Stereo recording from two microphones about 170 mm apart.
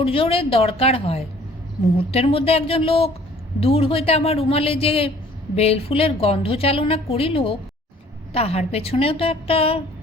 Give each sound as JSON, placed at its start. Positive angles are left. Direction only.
{"t": 0.0, "sound": "a woman's voice", "side_deg": 35}